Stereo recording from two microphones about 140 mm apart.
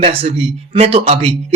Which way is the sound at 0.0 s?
45° right (ahead or behind).